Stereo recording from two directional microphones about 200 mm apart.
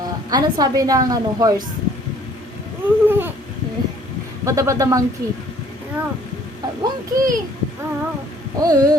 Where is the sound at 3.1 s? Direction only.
10° right (ahead or behind).